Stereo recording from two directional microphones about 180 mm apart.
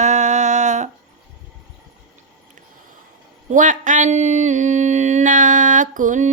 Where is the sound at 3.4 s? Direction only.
45° right (ahead or behind).